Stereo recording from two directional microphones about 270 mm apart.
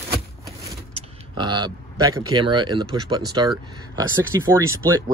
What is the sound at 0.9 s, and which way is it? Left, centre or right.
Speech, centre.